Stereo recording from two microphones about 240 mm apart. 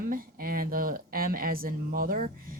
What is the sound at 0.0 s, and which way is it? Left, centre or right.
Speech, right.